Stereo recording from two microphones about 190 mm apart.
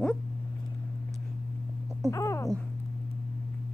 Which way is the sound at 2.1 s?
15° left (ahead or behind).